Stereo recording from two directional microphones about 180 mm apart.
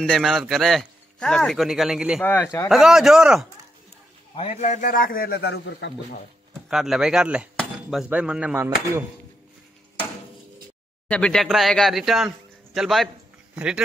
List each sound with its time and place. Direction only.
0.0 s a man's voice: centre (ahead or behind)
2.2 s speech: 15° left (ahead or behind)
2.7 s a man's voice: centre (ahead or behind)
4.4 s a man's voice: 40° left (ahead or behind); by 5.9 s 75° left (ahead or behind)
6.5 s speech: centre (ahead or behind)
11.1 s a man's voice: 5° left (ahead or behind)